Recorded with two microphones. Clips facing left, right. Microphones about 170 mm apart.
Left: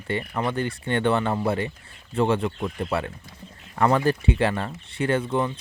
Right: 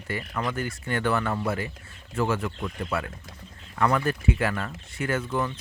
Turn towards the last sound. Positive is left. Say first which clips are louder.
# left 4 dB
turn(degrees=25)  # may be behind; listen again after turning